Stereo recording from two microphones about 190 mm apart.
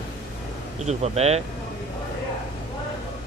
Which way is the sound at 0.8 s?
35° right (ahead or behind).